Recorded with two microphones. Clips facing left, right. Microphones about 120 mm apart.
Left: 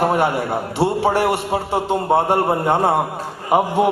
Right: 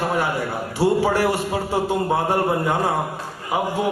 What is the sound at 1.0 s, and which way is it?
A man's voice, 25° left (ahead or behind).